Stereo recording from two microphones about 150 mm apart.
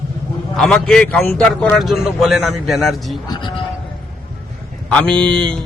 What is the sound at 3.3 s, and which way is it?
Sheep, 30° left (ahead or behind).